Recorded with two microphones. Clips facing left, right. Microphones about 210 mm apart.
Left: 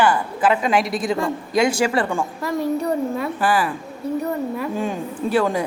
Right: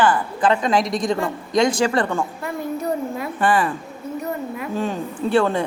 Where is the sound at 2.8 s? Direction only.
30° left (ahead or behind).